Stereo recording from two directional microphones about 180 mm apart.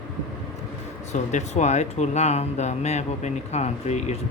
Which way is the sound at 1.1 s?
40° left (ahead or behind).